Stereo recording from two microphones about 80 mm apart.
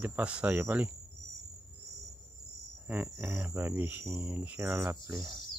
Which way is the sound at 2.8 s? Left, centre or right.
Right.